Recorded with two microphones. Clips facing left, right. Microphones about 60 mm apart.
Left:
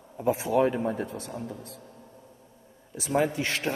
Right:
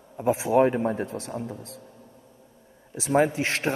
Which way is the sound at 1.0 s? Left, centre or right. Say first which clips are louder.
Right 3 dB; right.